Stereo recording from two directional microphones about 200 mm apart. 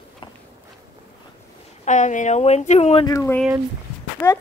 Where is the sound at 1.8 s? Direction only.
35° left (ahead or behind).